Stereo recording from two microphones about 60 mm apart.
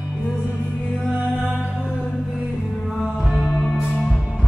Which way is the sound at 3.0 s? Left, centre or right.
Centre.